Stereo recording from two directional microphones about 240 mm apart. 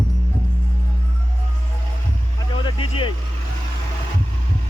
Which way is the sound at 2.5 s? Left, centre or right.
Left.